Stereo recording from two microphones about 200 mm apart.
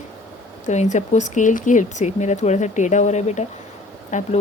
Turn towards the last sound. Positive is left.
turn(degrees=40)  # may be behind; listen again after turning